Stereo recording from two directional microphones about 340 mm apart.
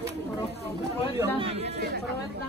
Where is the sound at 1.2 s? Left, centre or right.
Centre.